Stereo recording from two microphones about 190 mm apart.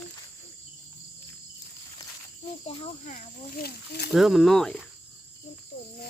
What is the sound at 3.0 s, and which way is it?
Speech, 40° left (ahead or behind).